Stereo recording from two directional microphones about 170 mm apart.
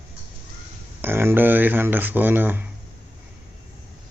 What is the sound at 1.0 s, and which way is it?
Speech, 15° right (ahead or behind).